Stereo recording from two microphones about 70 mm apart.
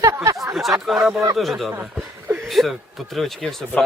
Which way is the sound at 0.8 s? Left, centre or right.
Centre.